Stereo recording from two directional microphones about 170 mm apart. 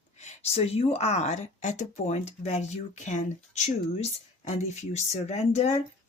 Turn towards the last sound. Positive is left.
turn(degrees=40)  # may be behind; listen again after turning